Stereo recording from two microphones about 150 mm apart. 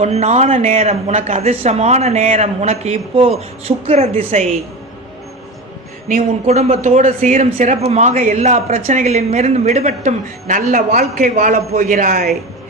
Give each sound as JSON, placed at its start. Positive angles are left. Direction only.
{"t": 0.0, "sound": "a man's voice", "side_deg": -45}
{"t": 6.4, "sound": "a man's voice", "side_deg": -45}
{"t": 10.4, "sound": "a man's voice", "side_deg": -60}